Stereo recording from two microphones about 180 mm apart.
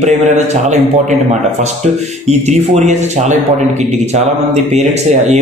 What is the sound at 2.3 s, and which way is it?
Speech, 40° right (ahead or behind).